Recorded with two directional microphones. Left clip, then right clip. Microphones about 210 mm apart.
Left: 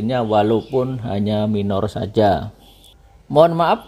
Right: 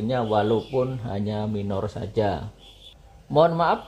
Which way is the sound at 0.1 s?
35° left (ahead or behind).